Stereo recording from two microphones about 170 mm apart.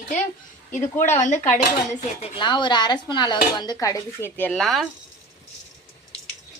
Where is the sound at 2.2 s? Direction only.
30° left (ahead or behind); by 4.9 s centre (ahead or behind).